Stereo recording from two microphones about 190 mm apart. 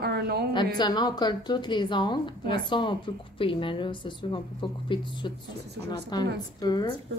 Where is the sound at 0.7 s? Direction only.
20° left (ahead or behind).